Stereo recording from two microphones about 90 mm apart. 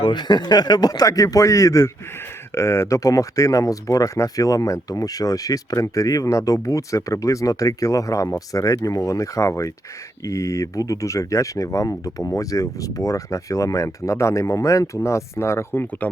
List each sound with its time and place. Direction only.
0.0 s speech: 55° left (ahead or behind); by 16.0 s 20° left (ahead or behind)